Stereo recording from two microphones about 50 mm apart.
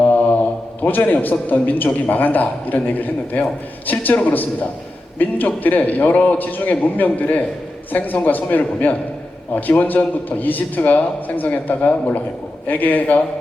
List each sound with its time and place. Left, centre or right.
0.9 s a man's voice: left